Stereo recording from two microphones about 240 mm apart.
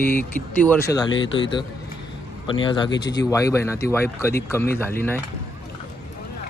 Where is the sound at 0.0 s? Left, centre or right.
Centre.